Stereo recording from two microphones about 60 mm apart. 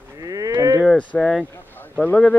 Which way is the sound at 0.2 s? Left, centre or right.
Right.